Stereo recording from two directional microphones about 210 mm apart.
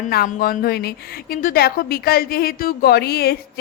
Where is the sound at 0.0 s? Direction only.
40° left (ahead or behind).